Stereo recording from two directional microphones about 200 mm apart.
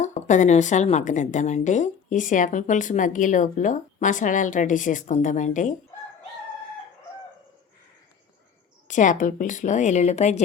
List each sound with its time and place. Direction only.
0.0 s a woman's voice: 35° left (ahead or behind)
8.9 s a woman's voice: 40° left (ahead or behind)